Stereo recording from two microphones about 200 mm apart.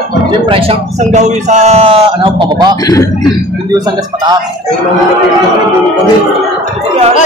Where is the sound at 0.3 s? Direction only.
25° right (ahead or behind).